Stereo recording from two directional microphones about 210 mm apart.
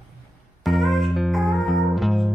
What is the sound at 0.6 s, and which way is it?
Music, centre (ahead or behind).